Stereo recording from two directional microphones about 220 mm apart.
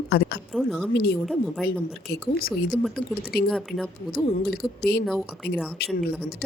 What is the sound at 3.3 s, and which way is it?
Speech, 45° left (ahead or behind).